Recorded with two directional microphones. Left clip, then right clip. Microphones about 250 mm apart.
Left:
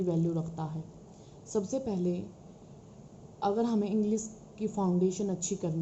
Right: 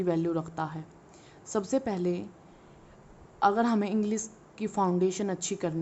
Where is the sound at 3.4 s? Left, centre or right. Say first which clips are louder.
Right 5 dB; right.